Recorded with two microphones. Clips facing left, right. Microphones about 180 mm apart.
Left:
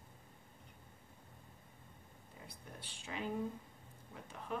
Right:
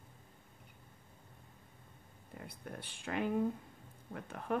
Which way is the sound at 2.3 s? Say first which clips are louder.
Right 7 dB; 60° right (ahead or behind).